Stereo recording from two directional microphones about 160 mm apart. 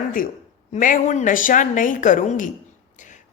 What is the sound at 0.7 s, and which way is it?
A woman's voice, 55° left (ahead or behind).